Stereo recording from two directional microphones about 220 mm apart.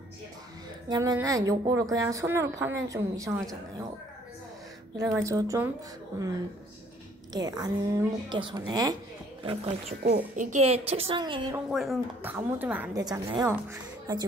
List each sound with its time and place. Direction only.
0.8 s a woman's voice: 15° right (ahead or behind)
4.9 s a woman's voice: 15° right (ahead or behind)
7.3 s a woman's voice: 15° right (ahead or behind)
10.0 s a child's voice: 40° right (ahead or behind); by 11.4 s 20° right (ahead or behind)
11.5 s a woman's voice: centre (ahead or behind)